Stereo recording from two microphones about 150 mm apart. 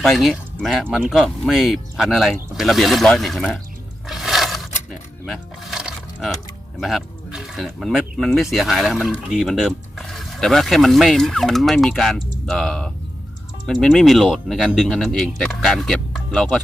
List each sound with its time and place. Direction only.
0.0 s speech: centre (ahead or behind)
4.1 s a sound: centre (ahead or behind)
4.9 s speech: centre (ahead or behind)